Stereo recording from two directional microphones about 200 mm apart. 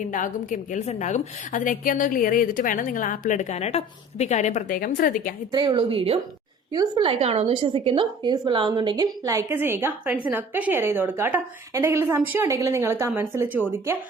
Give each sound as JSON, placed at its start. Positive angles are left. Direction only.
{"t": 0.1, "sound": "a woman's voice", "side_deg": 40}
{"t": 5.5, "sound": "a woman's voice", "side_deg": -20}